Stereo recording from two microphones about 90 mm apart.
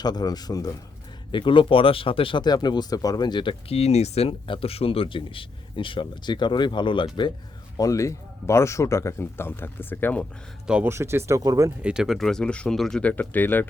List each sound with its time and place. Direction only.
0.0 s speech: 50° left (ahead or behind)
1.3 s speech: 65° left (ahead or behind)
2.4 s speech: 50° left (ahead or behind)
4.2 s speech: 75° left (ahead or behind); by 7.3 s 60° left (ahead or behind)
7.8 s speech: 35° left (ahead or behind); by 10.2 s 20° left (ahead or behind)
10.8 s speech: 30° right (ahead or behind)
11.8 s speech: 10° right (ahead or behind)
13.0 s speech: 20° left (ahead or behind)